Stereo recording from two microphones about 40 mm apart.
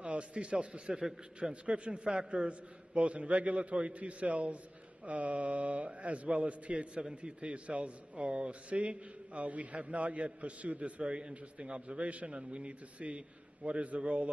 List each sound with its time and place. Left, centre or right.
0.0 s a man's voice: right